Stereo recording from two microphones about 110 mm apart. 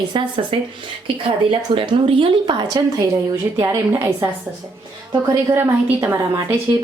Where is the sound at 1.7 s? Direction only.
55° right (ahead or behind); by 3.1 s 35° right (ahead or behind).